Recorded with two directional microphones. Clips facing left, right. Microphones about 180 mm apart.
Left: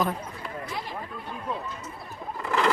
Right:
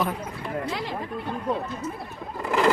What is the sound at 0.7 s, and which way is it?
Speech, 85° right.